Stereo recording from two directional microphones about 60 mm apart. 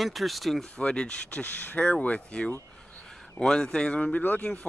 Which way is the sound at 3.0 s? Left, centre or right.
Centre.